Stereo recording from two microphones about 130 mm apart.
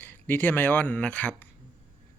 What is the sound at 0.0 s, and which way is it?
Speech, 15° left (ahead or behind).